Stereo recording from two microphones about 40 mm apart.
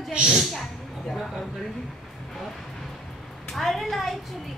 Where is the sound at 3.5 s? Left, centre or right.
Centre.